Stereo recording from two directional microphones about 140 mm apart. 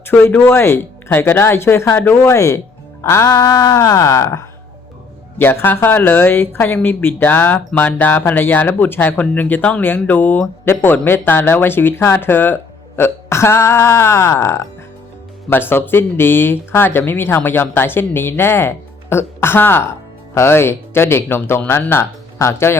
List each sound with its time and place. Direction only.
0.1 s speech: 10° left (ahead or behind)